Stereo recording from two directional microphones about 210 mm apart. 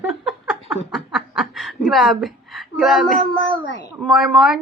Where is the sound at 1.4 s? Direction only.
Centre (ahead or behind).